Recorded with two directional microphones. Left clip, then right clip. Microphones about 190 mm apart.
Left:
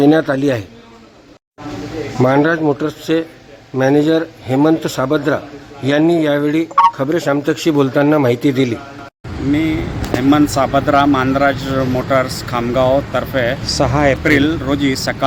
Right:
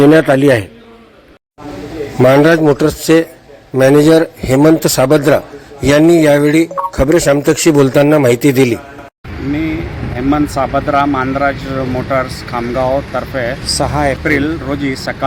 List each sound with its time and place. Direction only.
0.0 s speech: 20° right (ahead or behind)
2.2 s speech: 20° right (ahead or behind)
9.5 s speech: 10° left (ahead or behind)